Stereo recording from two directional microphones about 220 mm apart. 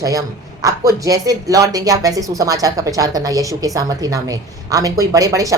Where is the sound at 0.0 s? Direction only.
15° right (ahead or behind).